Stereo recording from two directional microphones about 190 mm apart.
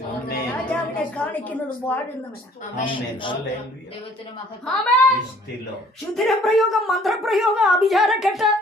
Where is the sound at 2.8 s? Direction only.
25° left (ahead or behind).